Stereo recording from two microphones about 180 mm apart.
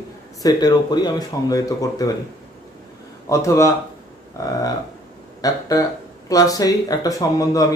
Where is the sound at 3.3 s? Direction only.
15° left (ahead or behind).